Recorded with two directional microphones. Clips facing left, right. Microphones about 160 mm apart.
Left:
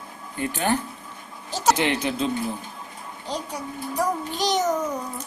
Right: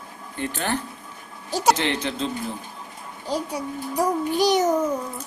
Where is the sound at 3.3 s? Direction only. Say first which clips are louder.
Right 4 dB; 10° right (ahead or behind).